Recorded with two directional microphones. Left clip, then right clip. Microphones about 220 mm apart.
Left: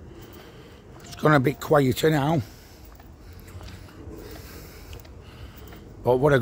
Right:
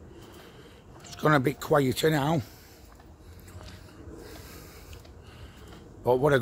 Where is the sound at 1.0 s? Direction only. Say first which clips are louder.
Left 4 dB; 10° left (ahead or behind).